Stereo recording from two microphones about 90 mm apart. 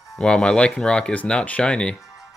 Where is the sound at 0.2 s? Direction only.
5° left (ahead or behind).